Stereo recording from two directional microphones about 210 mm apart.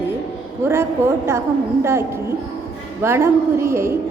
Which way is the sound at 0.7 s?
10° right (ahead or behind).